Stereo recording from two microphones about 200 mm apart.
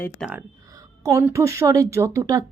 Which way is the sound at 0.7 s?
15° right (ahead or behind).